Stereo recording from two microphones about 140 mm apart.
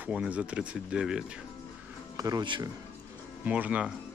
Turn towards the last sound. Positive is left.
turn(degrees=-10)  # may be behind; listen again after turning